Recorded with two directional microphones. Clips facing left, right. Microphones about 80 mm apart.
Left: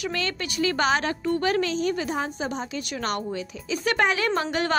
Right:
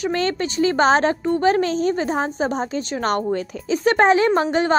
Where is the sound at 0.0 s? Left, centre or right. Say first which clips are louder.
Right 8 dB; right.